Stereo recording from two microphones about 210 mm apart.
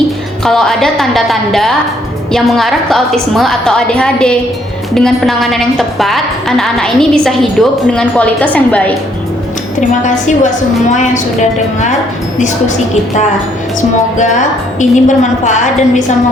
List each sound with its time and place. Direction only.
0.4 s a woman's voice: centre (ahead or behind)
10.0 s a woman's voice: 35° left (ahead or behind)
14.8 s a woman's voice: 35° left (ahead or behind)